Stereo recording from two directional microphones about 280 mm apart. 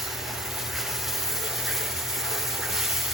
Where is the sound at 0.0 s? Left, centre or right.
Centre.